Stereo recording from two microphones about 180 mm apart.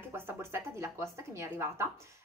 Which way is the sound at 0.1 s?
15° right (ahead or behind).